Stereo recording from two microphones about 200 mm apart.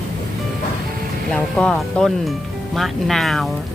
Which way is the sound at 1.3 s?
5° left (ahead or behind).